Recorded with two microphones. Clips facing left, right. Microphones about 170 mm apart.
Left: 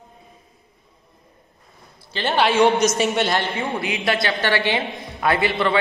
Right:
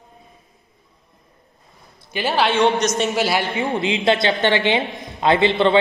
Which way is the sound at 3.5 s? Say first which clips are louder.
Right 4 dB; 25° right (ahead or behind).